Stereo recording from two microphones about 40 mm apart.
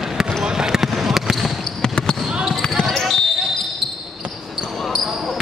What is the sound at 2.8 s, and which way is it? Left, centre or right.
Basketball bounce, centre.